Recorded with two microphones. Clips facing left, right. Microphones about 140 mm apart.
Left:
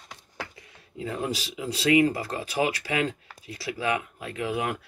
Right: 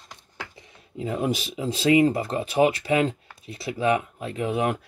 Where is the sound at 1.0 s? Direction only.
20° right (ahead or behind).